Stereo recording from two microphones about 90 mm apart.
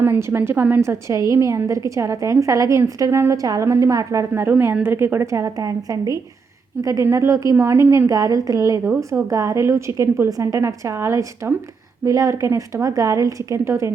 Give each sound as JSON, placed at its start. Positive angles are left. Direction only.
{"t": 0.0, "sound": "a woman's voice", "side_deg": -25}
{"t": 4.4, "sound": "a woman's voice", "side_deg": -20}